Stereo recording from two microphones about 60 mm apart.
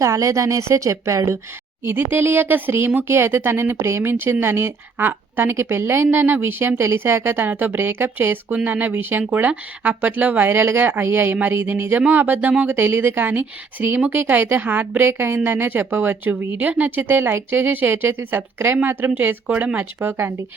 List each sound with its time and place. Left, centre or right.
0.0 s speech: right
1.8 s speech: right
12.7 s speech: right
19.8 s speech: right